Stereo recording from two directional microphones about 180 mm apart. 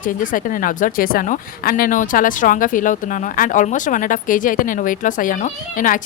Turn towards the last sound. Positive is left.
turn(degrees=50)  # may be behind; listen again after turning